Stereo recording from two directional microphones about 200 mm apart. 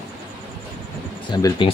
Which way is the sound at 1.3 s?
20° left (ahead or behind).